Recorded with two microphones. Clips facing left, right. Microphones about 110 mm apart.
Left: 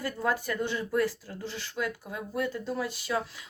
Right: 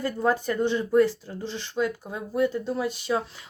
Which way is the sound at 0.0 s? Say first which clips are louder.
Right 5 dB; 25° right (ahead or behind).